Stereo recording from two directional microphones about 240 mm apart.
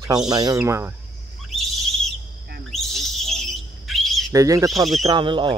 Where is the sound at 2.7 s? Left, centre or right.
Centre.